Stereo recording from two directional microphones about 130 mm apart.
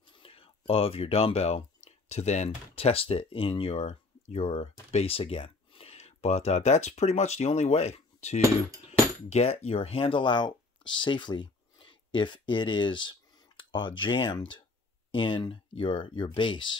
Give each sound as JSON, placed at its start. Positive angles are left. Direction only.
{"t": 0.1, "sound": "speech", "side_deg": 45}